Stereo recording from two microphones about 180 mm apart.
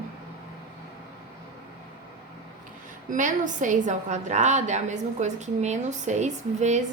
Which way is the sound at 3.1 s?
45° right (ahead or behind).